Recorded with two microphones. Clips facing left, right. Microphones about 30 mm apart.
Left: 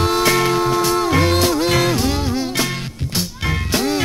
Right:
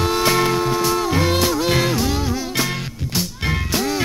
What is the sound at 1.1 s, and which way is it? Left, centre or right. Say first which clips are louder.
Music: left 3 dB; left.